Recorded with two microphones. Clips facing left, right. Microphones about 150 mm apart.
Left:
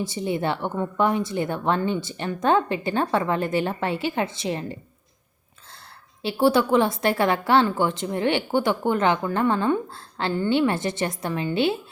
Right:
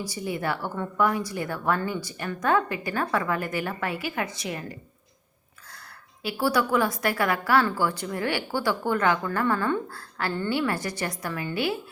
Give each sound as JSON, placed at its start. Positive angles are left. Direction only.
{"t": 0.0, "sound": "a woman's voice", "side_deg": 25}
{"t": 6.2, "sound": "a woman's voice", "side_deg": 25}